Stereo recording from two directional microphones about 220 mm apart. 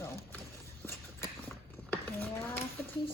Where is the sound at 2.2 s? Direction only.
10° left (ahead or behind).